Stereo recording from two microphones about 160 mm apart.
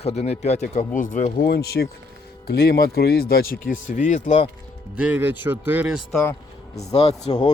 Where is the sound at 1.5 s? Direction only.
85° left; by 4.4 s 50° left (ahead or behind).